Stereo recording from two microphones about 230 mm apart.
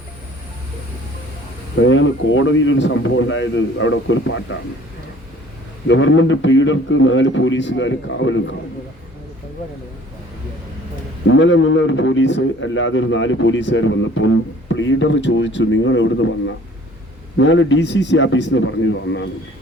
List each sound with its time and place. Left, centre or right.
1.8 s speech: left
5.9 s speech: left
11.3 s a man's voice: left
17.3 s a man's voice: left